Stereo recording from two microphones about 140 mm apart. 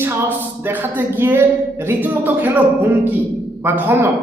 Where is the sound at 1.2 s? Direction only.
15° right (ahead or behind).